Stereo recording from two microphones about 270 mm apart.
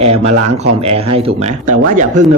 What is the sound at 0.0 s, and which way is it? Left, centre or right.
Speech, right.